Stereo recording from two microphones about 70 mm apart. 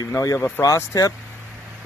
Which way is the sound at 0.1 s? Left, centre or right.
Left.